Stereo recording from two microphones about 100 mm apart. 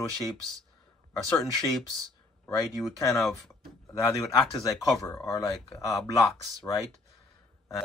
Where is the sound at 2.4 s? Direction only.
30° left (ahead or behind).